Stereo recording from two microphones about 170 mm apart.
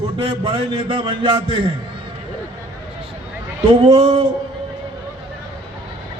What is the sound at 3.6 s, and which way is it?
Speech, 30° right (ahead or behind).